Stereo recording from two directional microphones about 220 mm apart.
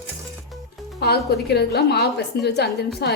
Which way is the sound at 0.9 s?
45° left (ahead or behind).